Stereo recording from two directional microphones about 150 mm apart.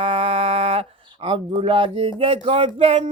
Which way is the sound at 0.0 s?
40° right (ahead or behind).